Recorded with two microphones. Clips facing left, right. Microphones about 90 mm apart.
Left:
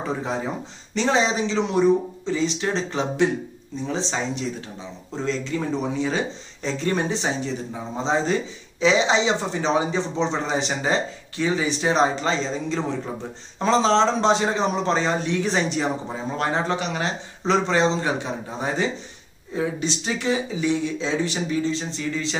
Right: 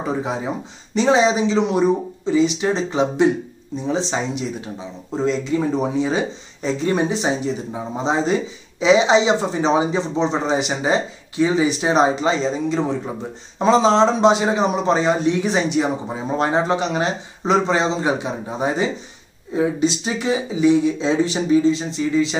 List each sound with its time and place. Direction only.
0.0 s speech: 10° right (ahead or behind)
16.3 s speech: 20° right (ahead or behind)